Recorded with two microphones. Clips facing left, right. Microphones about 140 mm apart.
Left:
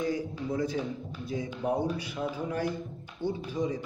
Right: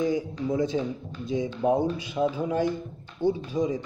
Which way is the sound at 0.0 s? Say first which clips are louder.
Right 5 dB; 20° right (ahead or behind).